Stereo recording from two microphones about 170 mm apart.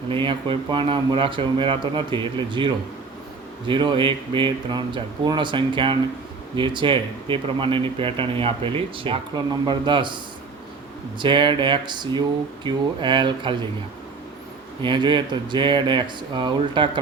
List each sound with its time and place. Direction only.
0.1 s speech: 30° right (ahead or behind)
11.2 s speech: 30° right (ahead or behind)
14.8 s speech: 25° right (ahead or behind)